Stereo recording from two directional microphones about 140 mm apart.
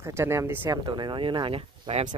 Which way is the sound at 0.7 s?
35° right (ahead or behind).